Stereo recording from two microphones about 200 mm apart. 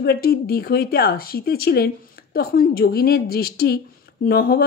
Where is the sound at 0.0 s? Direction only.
50° left (ahead or behind).